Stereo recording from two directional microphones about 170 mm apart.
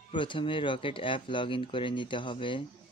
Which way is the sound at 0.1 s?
30° left (ahead or behind).